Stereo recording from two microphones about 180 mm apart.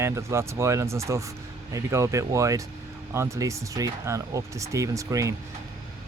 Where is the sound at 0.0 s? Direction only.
15° right (ahead or behind).